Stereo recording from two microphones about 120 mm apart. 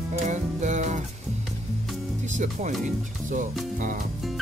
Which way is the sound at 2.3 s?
90° right.